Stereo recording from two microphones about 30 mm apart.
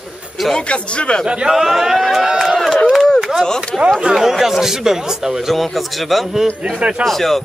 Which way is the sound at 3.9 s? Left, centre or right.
Centre.